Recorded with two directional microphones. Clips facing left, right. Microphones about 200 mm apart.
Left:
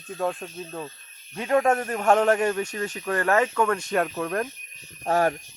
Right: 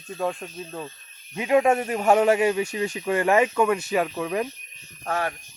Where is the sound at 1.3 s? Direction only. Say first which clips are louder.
Right 2 dB; 10° right (ahead or behind).